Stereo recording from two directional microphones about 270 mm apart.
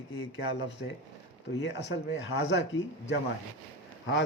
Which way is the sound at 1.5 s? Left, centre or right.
Left.